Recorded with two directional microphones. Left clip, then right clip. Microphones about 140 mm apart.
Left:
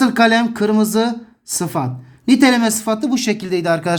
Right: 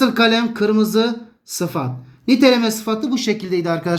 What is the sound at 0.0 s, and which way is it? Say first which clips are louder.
Speech: left 2 dB; 75° left (ahead or behind).